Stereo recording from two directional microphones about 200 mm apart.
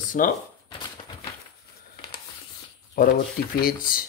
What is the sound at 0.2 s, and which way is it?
Speech, 40° left (ahead or behind).